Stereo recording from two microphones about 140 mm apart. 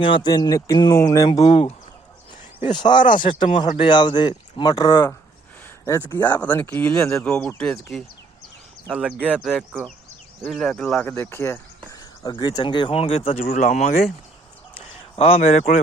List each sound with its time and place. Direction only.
0.0 s speech: 35° left (ahead or behind)
2.6 s speech: 30° left (ahead or behind)
7.3 s speech: 5° left (ahead or behind)
8.9 s speech: 5° right (ahead or behind)
11.1 s speech: 20° left (ahead or behind)
11.9 s speech: 30° left (ahead or behind); by 13.3 s 45° left (ahead or behind)
13.5 s speech: 55° left (ahead or behind)
14.8 s speech: 45° left (ahead or behind)